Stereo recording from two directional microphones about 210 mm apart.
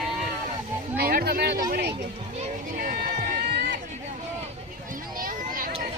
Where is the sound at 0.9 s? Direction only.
45° right (ahead or behind).